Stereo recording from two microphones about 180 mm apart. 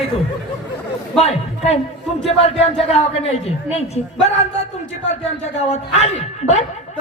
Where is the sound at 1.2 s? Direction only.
35° left (ahead or behind).